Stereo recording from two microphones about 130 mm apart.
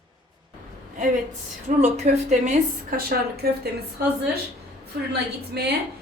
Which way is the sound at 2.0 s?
60° right (ahead or behind).